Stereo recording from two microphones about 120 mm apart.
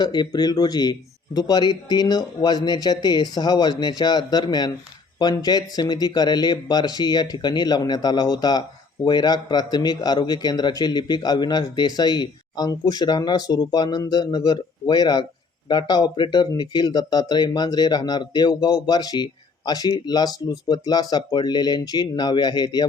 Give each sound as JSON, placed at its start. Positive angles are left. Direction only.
{"t": 0.0, "sound": "speech", "side_deg": 35}